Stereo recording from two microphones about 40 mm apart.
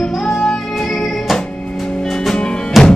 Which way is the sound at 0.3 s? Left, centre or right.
Centre.